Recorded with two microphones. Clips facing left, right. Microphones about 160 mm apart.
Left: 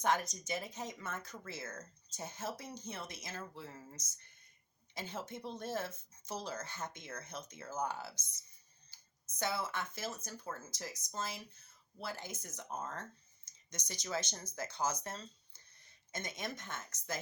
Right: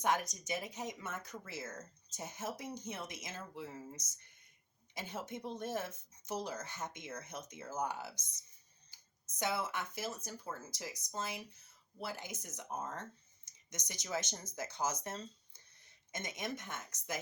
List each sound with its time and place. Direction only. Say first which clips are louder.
0.0 s speech: left 1 dB; 15° right (ahead or behind)